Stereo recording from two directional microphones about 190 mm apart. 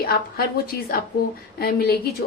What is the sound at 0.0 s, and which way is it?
A woman's voice, 50° left (ahead or behind).